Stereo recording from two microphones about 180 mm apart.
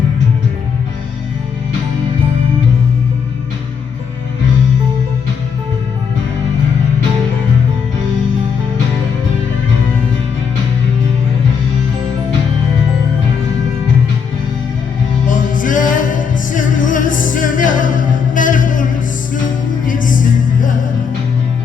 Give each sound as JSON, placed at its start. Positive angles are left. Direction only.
{"t": 15.3, "sound": "music", "side_deg": 45}